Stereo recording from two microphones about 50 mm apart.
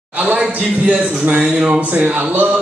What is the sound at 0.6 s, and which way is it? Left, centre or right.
Speech, right.